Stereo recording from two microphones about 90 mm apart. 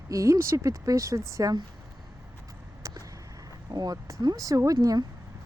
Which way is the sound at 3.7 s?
45° right (ahead or behind).